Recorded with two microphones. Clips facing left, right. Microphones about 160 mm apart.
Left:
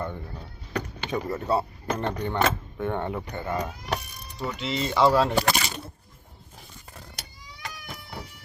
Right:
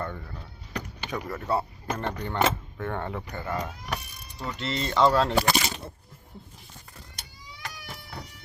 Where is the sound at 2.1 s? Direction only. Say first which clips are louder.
Right 2 dB; 20° left (ahead or behind).